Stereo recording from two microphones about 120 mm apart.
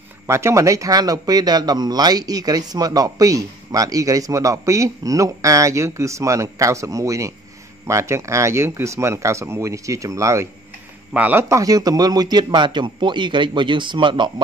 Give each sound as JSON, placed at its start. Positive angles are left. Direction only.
{"t": 0.3, "sound": "speech", "side_deg": -25}
{"t": 11.1, "sound": "speech", "side_deg": -15}
{"t": 11.4, "sound": "speech", "side_deg": -30}